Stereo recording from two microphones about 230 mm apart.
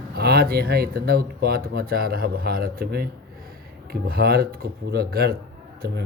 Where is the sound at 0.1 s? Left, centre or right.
Right.